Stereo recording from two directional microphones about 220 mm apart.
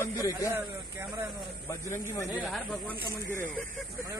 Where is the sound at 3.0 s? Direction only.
15° left (ahead or behind).